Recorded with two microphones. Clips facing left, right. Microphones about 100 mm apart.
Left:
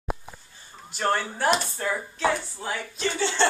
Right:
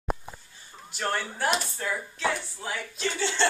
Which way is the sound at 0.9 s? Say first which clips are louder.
Left 4 dB; 35° left (ahead or behind).